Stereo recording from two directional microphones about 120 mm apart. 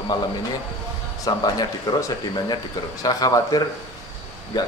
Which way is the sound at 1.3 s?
35° left (ahead or behind).